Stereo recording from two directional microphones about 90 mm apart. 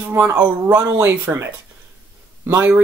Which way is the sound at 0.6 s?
40° right (ahead or behind).